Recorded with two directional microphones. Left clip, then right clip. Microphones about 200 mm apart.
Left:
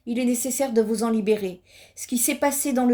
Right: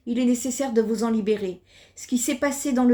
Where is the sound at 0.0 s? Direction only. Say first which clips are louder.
Right 1 dB; 20° left (ahead or behind).